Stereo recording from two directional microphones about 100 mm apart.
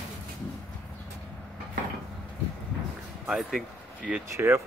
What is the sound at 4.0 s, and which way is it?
Speech, 15° right (ahead or behind).